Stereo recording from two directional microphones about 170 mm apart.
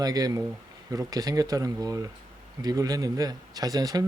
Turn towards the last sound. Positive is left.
turn(degrees=-20)  # may be behind; listen again after turning